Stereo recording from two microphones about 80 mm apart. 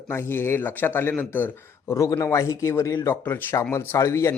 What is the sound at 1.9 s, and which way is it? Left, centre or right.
Speech, left.